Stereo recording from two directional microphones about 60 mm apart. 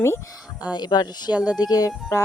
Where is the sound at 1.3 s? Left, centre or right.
Right.